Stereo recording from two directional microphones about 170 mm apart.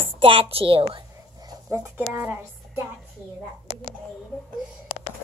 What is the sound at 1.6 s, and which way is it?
Speech, 15° right (ahead or behind).